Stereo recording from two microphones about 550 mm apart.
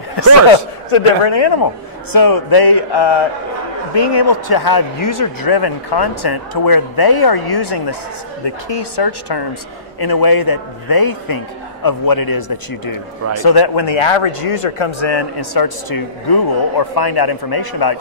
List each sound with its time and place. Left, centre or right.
0.8 s speech: left